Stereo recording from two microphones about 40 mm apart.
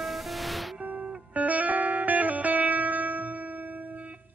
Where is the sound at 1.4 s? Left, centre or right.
Right.